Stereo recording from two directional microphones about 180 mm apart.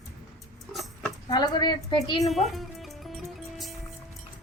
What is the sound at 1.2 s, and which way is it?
A woman's voice, 25° left (ahead or behind).